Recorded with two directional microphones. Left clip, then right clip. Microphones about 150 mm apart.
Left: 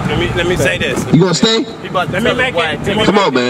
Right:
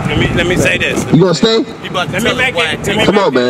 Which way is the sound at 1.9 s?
15° right (ahead or behind).